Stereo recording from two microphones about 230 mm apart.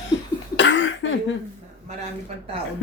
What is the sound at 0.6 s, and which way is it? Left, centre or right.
Cough, left.